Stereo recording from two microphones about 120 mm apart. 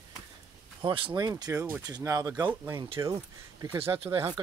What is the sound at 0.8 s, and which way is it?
Speech, 45° right (ahead or behind).